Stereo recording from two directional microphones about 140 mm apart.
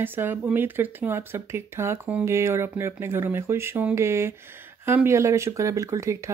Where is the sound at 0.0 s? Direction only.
15° right (ahead or behind).